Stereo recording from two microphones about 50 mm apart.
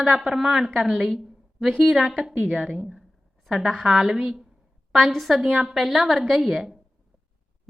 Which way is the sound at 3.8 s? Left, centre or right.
Centre.